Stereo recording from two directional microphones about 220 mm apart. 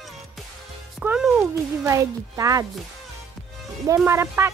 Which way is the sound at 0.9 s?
5° right (ahead or behind).